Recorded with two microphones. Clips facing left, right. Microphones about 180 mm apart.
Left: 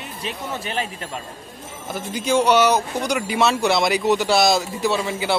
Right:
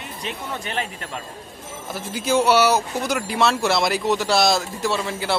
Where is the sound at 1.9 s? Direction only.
5° right (ahead or behind).